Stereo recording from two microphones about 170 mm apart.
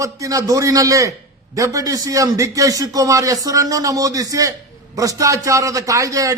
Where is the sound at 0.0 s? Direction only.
20° right (ahead or behind).